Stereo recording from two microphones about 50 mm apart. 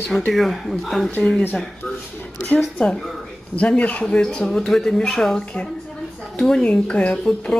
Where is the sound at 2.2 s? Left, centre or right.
Left.